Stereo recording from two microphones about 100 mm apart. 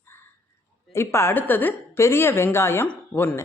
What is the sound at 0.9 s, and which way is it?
A woman's voice, 25° left (ahead or behind).